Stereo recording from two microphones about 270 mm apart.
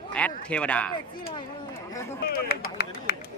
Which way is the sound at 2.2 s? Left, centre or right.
Left.